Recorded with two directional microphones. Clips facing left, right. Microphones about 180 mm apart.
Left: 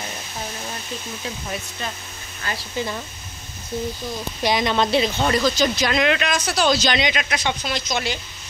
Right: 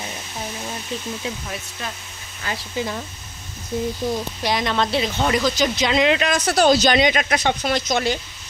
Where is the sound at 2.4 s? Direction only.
5° right (ahead or behind).